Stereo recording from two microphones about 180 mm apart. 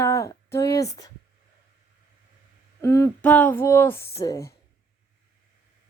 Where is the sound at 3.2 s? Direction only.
10° left (ahead or behind).